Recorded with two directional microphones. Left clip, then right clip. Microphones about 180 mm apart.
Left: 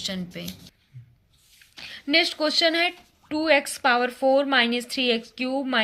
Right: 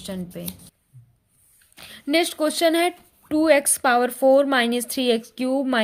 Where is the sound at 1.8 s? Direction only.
55° right (ahead or behind).